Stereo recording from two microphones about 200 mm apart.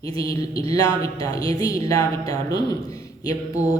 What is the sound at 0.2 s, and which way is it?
A woman's voice, 15° left (ahead or behind).